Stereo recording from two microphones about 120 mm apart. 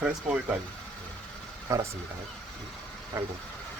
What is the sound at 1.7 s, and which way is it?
Speech, 25° right (ahead or behind).